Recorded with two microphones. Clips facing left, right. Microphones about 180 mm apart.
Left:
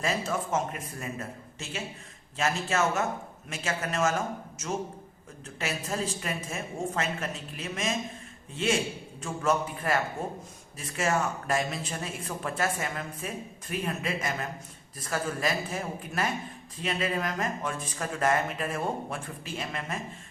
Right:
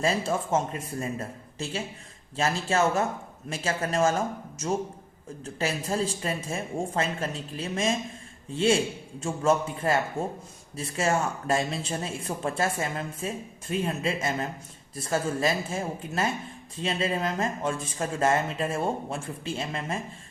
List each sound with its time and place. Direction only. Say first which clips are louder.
0.0 s a woman's voice: right 3 dB; 30° right (ahead or behind)
5.5 s a woman's voice: right 4 dB; 30° right (ahead or behind)